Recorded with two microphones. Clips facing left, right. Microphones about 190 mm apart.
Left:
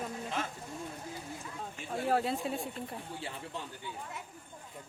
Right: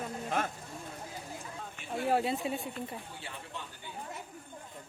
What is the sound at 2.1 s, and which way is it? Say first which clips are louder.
Speech: right 1 dB; 5° right (ahead or behind).